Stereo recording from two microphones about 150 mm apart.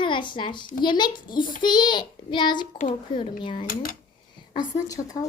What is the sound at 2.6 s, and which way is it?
Speech, 55° left (ahead or behind).